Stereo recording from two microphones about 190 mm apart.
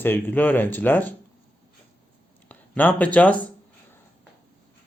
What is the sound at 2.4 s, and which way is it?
Speech, 10° left (ahead or behind).